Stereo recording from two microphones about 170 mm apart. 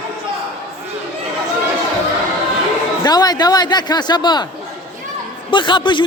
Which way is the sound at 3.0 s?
25° left (ahead or behind).